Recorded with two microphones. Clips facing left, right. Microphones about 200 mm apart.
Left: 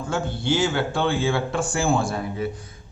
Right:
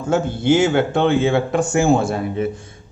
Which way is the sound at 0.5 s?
55° right (ahead or behind).